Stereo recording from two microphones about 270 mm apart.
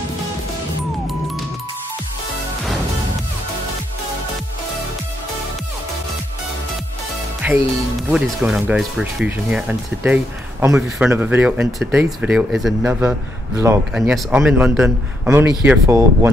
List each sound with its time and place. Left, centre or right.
1.0 s music: centre
7.4 s a man's voice: centre